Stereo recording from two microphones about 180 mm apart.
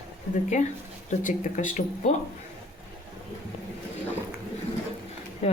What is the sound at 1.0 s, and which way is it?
A woman's voice, 45° left (ahead or behind).